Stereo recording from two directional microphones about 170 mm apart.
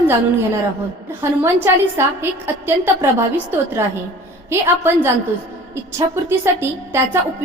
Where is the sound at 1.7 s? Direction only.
15° right (ahead or behind).